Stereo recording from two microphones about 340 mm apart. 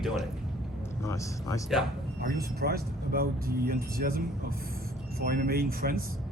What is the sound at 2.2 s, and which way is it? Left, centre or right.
Speech, right.